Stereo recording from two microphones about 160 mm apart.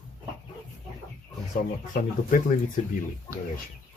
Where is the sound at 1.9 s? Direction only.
55° left (ahead or behind).